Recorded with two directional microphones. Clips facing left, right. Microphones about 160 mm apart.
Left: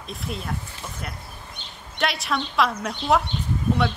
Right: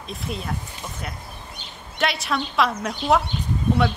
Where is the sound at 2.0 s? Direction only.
Centre (ahead or behind).